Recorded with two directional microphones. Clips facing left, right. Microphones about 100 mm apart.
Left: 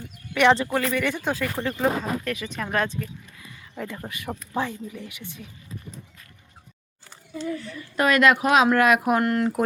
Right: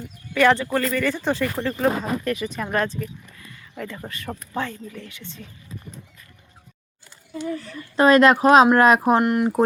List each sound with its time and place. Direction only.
0.3 s speech: 20° left (ahead or behind); by 2.9 s centre (ahead or behind)
3.3 s a sound: 10° left (ahead or behind)
4.5 s speech: 15° left (ahead or behind)
7.4 s speech: 35° right (ahead or behind)
9.2 s speech: 20° right (ahead or behind)